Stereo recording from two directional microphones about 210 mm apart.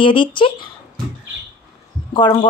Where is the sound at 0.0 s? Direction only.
25° left (ahead or behind).